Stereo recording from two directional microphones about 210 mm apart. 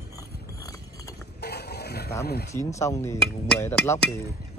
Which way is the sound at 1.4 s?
50° left (ahead or behind).